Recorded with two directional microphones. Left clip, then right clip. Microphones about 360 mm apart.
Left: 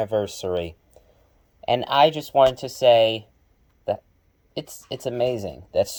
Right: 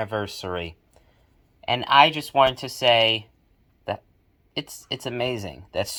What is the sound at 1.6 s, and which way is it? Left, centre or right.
Speech, centre.